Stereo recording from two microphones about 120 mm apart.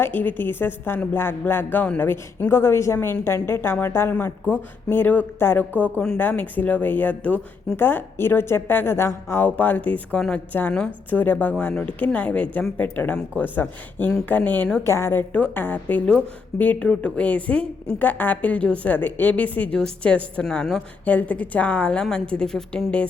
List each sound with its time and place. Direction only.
0.0 s a woman's voice: 15° left (ahead or behind)
5.8 s a woman's voice: 5° left (ahead or behind)
6.1 s a woman's voice: 15° left (ahead or behind)